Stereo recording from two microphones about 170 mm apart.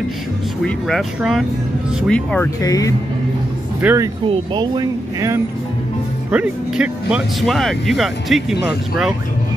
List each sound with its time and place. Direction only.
0.7 s speech: centre (ahead or behind)
2.6 s speech: 20° left (ahead or behind)
3.8 s speech: 15° right (ahead or behind)
6.3 s speech: 5° right (ahead or behind)